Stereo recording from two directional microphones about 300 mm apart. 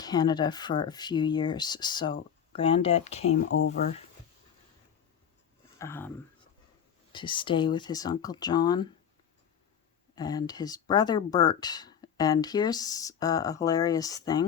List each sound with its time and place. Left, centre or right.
0.0 s speech: centre
5.8 s speech: centre
7.1 s speech: centre
10.2 s speech: centre